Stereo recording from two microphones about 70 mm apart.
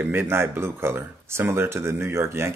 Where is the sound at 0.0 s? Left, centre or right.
Right.